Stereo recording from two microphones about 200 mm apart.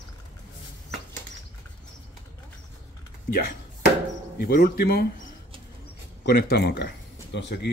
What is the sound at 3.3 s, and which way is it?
Speech, 45° left (ahead or behind).